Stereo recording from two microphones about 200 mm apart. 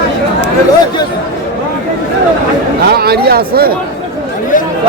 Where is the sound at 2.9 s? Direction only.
50° right (ahead or behind).